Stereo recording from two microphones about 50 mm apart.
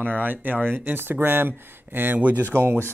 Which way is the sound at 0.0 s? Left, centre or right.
Right.